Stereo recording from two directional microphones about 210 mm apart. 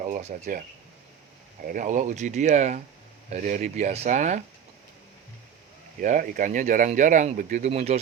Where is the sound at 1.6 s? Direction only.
40° right (ahead or behind).